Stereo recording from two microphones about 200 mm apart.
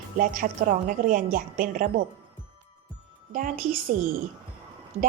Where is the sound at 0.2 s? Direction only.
45° right (ahead or behind).